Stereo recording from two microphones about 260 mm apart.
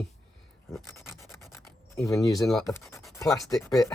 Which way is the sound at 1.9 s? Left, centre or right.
Centre.